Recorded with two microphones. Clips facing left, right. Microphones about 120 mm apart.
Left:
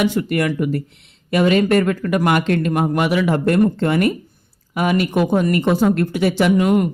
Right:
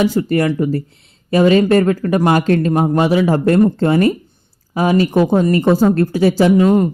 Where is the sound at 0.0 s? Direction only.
30° right (ahead or behind).